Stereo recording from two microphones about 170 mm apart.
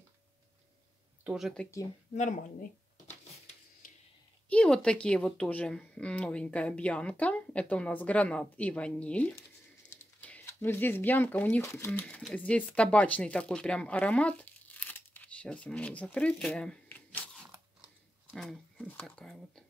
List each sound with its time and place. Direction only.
1.2 s speech: centre (ahead or behind)
2.1 s speech: 45° left (ahead or behind)
4.5 s a woman's voice: 5° left (ahead or behind)
14.4 s tearing: 10° left (ahead or behind)
18.3 s speech: centre (ahead or behind)